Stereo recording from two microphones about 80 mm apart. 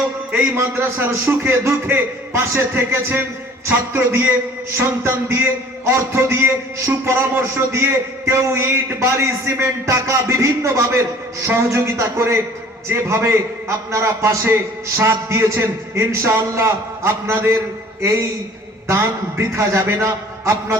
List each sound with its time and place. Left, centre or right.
0.5 s a man's voice: right